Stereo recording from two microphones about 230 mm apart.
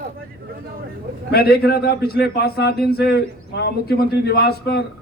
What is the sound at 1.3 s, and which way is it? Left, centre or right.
Speech, left.